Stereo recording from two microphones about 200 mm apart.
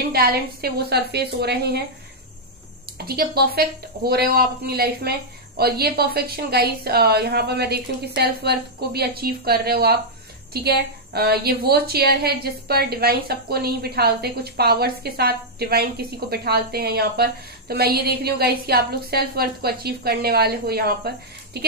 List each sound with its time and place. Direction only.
0.1 s a woman's voice: 50° right (ahead or behind)
3.0 s a woman's voice: 50° right (ahead or behind)